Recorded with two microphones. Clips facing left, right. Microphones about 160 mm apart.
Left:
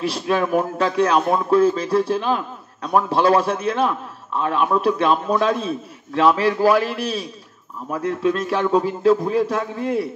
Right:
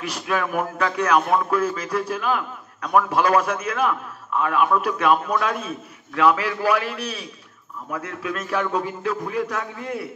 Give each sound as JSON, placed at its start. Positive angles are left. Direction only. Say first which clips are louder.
{"t": 0.0, "sound": "a man's voice", "louder": "left 5 dB", "side_deg": 30}